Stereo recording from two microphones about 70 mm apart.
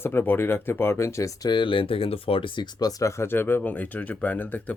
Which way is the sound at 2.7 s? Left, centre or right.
Left.